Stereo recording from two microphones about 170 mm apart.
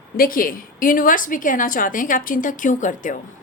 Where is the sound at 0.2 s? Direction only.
55° left (ahead or behind).